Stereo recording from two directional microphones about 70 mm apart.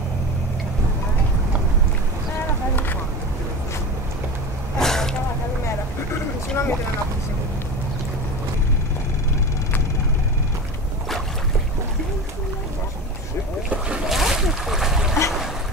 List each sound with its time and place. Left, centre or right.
4.7 s a sound: centre
6.5 s boat: left
13.7 s boat: centre
14.0 s splash: centre